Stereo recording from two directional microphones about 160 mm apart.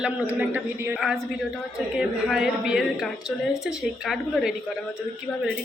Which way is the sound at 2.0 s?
5° right (ahead or behind).